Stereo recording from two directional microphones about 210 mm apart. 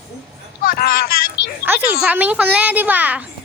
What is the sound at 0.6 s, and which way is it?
Speech, 45° left (ahead or behind).